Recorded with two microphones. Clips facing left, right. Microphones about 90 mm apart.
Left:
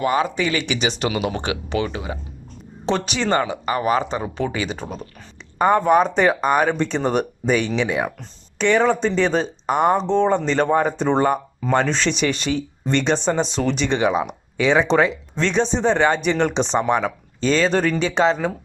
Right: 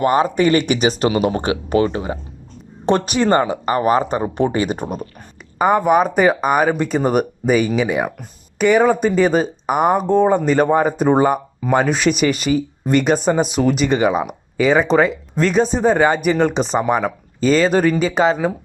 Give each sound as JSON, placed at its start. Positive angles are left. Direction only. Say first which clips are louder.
{"t": 0.0, "sound": "speech", "louder": "right 5 dB", "side_deg": -40}
{"t": 3.4, "sound": "speech", "louder": "right 4 dB", "side_deg": -40}
{"t": 4.5, "sound": "speech", "louder": "right 6 dB", "side_deg": -45}
{"t": 5.5, "sound": "speech", "louder": "right 1 dB", "side_deg": -5}